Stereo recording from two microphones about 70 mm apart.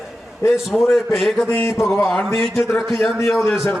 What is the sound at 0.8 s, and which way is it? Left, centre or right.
Speech, left.